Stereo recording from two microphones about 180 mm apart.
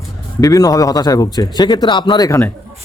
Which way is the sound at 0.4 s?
20° left (ahead or behind).